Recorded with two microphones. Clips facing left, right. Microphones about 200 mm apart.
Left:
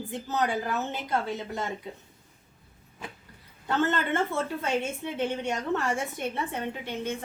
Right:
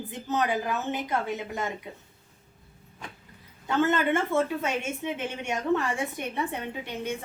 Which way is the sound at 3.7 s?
15° right (ahead or behind).